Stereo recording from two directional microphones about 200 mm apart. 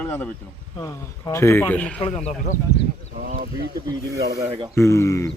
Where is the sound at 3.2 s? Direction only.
45° right (ahead or behind).